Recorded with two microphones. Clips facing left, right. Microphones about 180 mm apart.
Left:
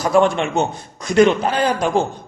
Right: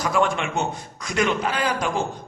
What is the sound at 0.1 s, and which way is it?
A man's voice, 30° left (ahead or behind).